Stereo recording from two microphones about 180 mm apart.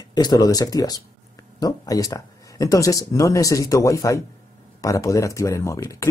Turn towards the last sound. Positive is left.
turn(degrees=15)  # may be behind; listen again after turning